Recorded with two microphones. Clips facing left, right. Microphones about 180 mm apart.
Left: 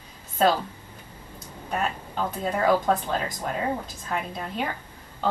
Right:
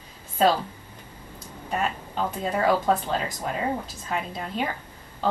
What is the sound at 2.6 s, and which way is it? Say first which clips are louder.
Speech: even; 10° right (ahead or behind).